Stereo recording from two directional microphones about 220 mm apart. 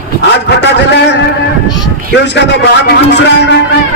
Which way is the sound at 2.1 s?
50° left (ahead or behind).